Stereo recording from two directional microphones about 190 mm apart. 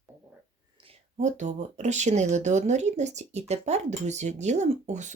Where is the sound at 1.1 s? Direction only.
40° right (ahead or behind).